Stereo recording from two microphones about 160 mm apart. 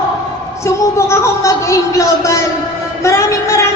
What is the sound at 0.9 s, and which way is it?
A man's voice, 15° left (ahead or behind).